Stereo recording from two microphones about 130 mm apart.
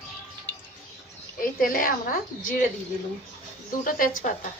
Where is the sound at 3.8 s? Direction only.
90° left.